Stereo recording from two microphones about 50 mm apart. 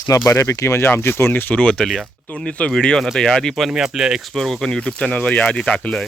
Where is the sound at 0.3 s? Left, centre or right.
Left.